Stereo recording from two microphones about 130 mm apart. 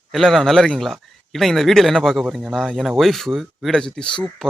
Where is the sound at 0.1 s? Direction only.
Centre (ahead or behind).